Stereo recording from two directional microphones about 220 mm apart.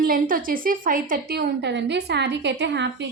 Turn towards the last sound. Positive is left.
turn(degrees=-55)  # may be behind; listen again after turning